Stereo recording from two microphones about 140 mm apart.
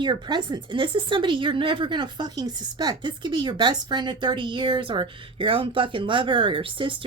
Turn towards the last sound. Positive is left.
turn(degrees=-40)  # may be behind; listen again after turning